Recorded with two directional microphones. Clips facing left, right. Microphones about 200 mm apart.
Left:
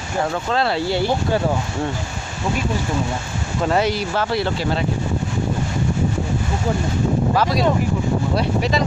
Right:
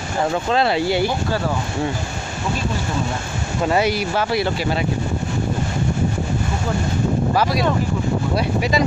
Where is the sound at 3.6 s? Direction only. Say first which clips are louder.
Right 1 dB; 5° right (ahead or behind).